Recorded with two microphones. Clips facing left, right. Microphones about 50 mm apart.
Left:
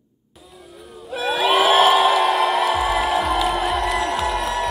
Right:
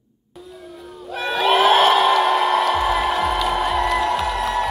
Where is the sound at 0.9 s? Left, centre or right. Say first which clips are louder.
Left 1 dB; centre.